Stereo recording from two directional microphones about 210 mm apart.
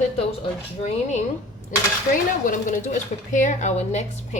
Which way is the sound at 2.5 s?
35° left (ahead or behind).